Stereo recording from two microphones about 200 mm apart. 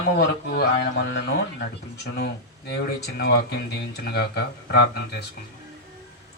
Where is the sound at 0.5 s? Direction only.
55° left (ahead or behind).